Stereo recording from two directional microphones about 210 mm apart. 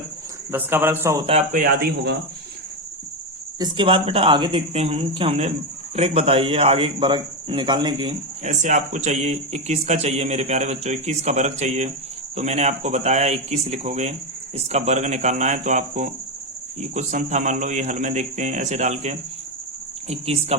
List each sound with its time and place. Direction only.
0.5 s a man's voice: 10° right (ahead or behind)
1.3 s speech: 30° right (ahead or behind)
1.6 s a man's voice: 45° right (ahead or behind)
3.6 s speech: 25° right (ahead or behind)
8.4 s speech: 35° right (ahead or behind)